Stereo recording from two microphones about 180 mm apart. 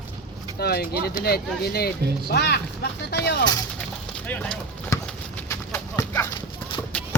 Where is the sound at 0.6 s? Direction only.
60° left (ahead or behind).